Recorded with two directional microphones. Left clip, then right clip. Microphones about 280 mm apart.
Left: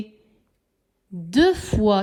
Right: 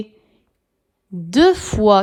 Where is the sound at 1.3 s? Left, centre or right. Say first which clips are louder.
Right 5 dB; centre.